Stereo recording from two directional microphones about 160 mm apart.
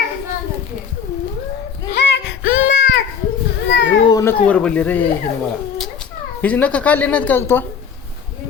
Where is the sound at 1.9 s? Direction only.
90° left.